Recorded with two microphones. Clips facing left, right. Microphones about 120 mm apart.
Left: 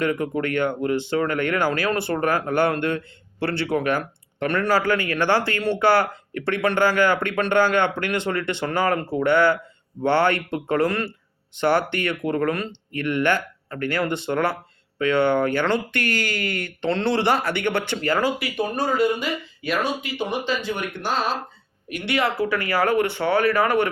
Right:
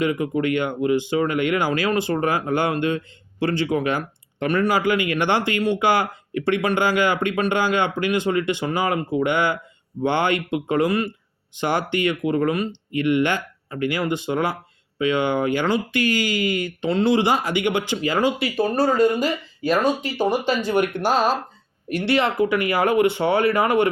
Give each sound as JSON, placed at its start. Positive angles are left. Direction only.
{"t": 0.2, "sound": "speech", "side_deg": -15}
{"t": 3.6, "sound": "speech", "side_deg": 60}
{"t": 3.9, "sound": "speech", "side_deg": -15}
{"t": 21.8, "sound": "speech", "side_deg": -30}